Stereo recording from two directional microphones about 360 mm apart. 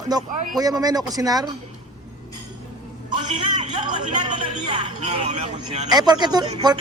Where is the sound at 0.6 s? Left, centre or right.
Centre.